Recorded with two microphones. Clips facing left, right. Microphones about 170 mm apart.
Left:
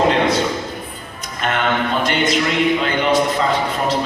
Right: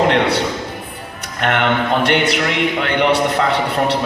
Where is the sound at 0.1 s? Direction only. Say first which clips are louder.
Right 1 dB; 70° right (ahead or behind).